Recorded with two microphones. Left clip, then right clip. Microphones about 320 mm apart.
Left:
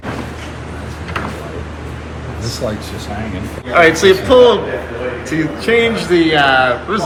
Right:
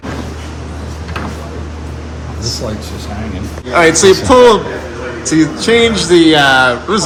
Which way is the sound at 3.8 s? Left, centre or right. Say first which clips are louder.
Right 1 dB; centre.